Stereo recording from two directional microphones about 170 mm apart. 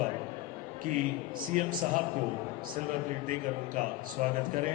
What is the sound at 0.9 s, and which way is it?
Speech, 50° right (ahead or behind).